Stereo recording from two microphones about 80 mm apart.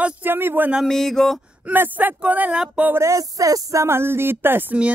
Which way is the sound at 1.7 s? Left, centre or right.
Right.